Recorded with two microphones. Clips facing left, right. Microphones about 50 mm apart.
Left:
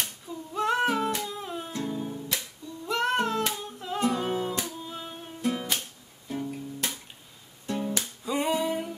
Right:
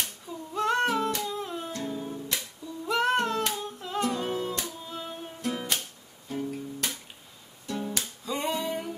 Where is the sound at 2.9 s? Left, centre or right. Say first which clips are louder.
Right 1 dB; centre.